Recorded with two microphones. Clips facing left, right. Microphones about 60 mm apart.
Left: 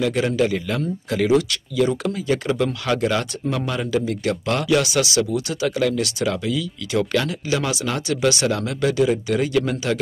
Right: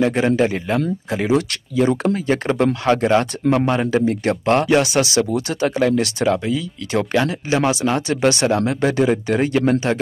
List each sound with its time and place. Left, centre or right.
0.0 s speech: right
1.5 s speech: right